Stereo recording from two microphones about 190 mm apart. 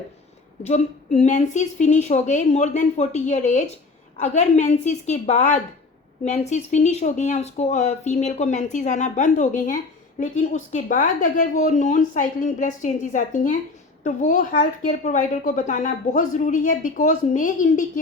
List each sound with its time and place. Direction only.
0.6 s a woman's voice: 40° left (ahead or behind)